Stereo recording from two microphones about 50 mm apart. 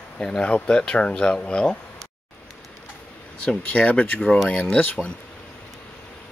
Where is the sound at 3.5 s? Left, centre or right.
Left.